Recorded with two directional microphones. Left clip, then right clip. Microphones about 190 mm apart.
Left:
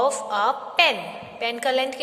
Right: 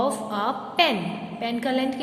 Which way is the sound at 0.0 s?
25° left (ahead or behind).